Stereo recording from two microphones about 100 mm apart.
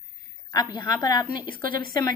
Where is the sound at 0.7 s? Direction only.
45° left (ahead or behind).